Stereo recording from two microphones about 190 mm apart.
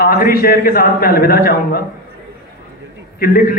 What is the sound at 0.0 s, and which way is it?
A man's voice, 50° left (ahead or behind).